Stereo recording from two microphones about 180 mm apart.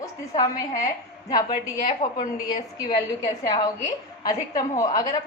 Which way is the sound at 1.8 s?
45° left (ahead or behind).